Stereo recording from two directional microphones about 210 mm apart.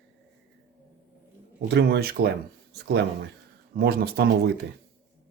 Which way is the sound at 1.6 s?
55° right (ahead or behind).